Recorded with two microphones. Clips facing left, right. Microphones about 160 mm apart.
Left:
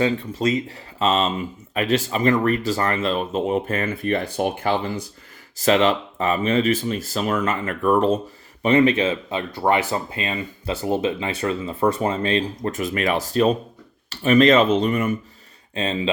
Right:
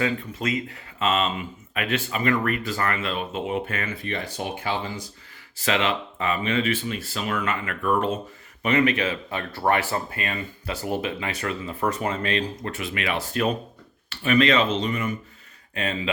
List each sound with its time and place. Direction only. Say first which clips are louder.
0.0 s speech: left 5 dB; 30° left (ahead or behind); by 4.9 s 50° left (ahead or behind)
5.5 s speech: left 7 dB; 40° left (ahead or behind)
12.7 s speech: left 7 dB; 40° left (ahead or behind)
15.7 s speech: left 4 dB; 25° left (ahead or behind)